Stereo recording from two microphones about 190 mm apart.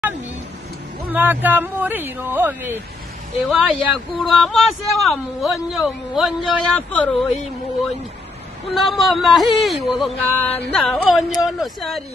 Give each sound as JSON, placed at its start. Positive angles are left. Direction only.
{"t": 1.0, "sound": "speech", "side_deg": -10}
{"t": 3.4, "sound": "a man's voice", "side_deg": 0}
{"t": 8.7, "sound": "a man's voice", "side_deg": 0}